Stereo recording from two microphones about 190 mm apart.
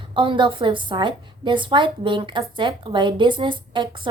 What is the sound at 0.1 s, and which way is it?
Speech, 25° right (ahead or behind).